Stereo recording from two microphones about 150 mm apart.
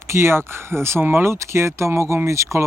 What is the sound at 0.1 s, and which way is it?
Speech, 15° right (ahead or behind).